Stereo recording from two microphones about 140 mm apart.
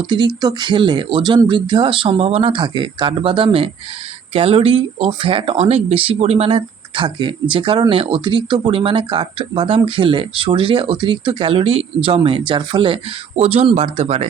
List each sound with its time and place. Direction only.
0.1 s speech: 30° right (ahead or behind); by 14.3 s 50° right (ahead or behind)